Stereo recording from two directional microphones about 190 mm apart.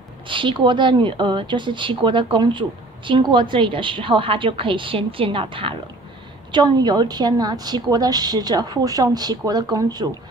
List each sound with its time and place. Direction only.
0.3 s a woman's voice: 25° right (ahead or behind)